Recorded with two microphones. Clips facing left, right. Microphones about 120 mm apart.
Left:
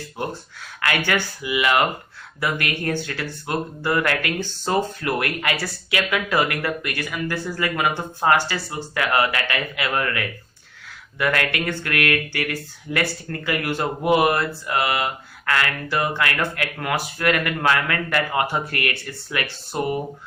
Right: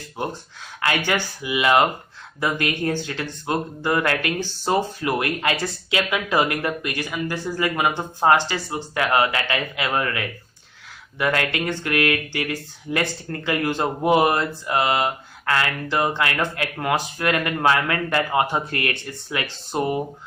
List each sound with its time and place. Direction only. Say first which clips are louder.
0.2 s speech: right 1 dB; 25° right (ahead or behind)